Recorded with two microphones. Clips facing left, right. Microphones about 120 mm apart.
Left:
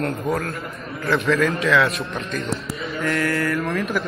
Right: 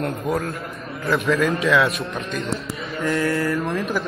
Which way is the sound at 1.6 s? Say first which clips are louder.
Even; 25° right (ahead or behind).